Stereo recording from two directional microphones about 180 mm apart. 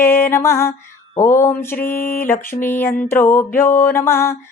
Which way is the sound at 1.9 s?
50° left (ahead or behind).